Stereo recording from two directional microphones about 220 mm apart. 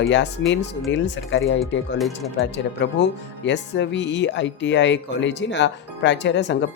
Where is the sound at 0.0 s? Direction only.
55° left (ahead or behind).